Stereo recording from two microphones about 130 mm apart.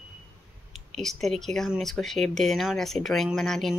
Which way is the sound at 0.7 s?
Centre (ahead or behind).